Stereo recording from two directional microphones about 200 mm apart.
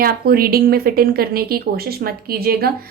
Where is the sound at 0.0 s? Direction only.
50° right (ahead or behind).